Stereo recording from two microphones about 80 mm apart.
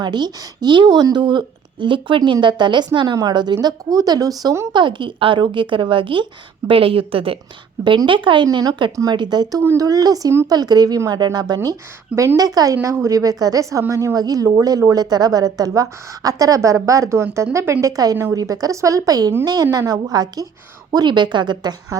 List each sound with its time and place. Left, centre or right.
0.0 s speech: right
0.9 s speech: right
4.7 s a woman's voice: right
6.6 s a woman's voice: right
7.9 s a woman's voice: right
8.5 s a woman's voice: right
9.7 s a woman's voice: right
12.7 s a woman's voice: right
20.9 s a woman's voice: right